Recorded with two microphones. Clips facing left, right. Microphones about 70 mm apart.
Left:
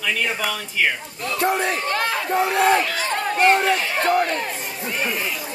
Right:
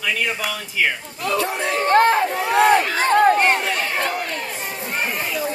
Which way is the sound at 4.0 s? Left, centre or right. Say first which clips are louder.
Left 5 dB; left.